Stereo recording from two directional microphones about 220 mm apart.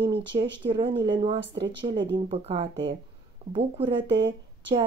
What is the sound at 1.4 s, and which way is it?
Speech, 50° right (ahead or behind).